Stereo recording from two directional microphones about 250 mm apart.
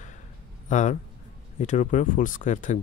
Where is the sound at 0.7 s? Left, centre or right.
Left.